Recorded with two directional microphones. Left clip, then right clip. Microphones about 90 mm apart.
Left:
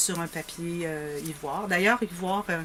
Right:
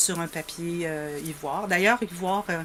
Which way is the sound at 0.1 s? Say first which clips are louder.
Right 2 dB; 25° right (ahead or behind).